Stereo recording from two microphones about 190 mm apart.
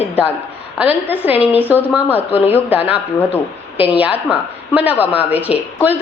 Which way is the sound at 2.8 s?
30° left (ahead or behind).